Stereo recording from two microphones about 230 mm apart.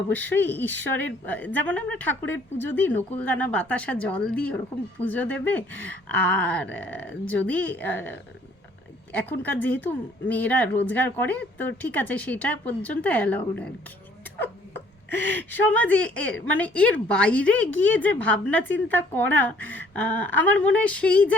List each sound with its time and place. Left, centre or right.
0.1 s speech: centre
15.1 s speech: right
15.4 s a woman's voice: centre